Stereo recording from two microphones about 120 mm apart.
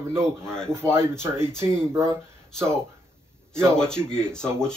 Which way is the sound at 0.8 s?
20° right (ahead or behind).